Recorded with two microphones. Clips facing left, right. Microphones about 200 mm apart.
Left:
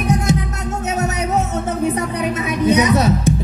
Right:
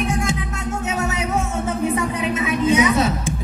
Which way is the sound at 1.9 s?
40° left (ahead or behind).